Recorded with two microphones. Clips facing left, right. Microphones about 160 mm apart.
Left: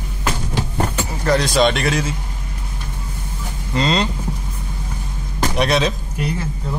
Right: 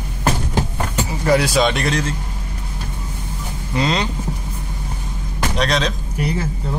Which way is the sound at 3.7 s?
5° right (ahead or behind).